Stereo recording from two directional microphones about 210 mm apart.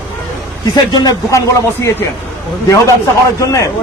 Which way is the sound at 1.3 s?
15° left (ahead or behind).